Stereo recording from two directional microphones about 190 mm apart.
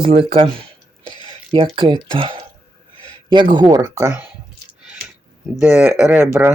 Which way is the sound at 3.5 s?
20° right (ahead or behind).